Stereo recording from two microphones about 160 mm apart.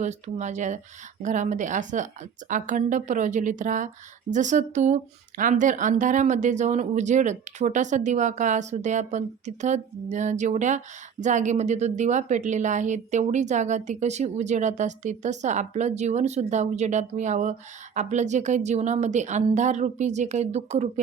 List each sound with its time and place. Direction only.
0.0 s speech: 45° right (ahead or behind)